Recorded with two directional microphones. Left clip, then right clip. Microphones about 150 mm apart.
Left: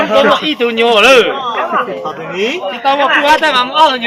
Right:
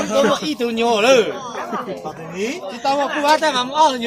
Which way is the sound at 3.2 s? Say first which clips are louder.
Left 6 dB; 90° right.